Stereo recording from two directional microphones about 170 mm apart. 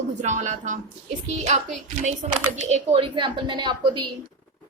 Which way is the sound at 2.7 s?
40° right (ahead or behind).